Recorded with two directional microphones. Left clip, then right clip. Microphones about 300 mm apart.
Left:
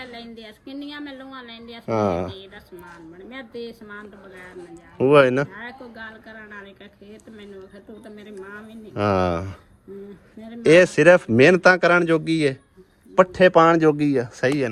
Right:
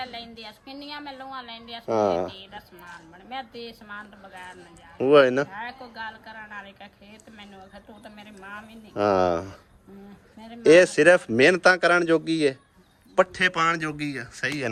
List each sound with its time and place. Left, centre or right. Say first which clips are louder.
1.1 s a woman's voice: right 1 dB; right
1.9 s a man's voice: even; left
3.6 s speech: left 3 dB; centre
5.0 s a man's voice: left 2 dB; centre
5.6 s speech: right 1 dB; centre
9.0 s a man's voice: even; left
10.6 s a man's voice: left 1 dB; left
13.1 s speech: left 7 dB; centre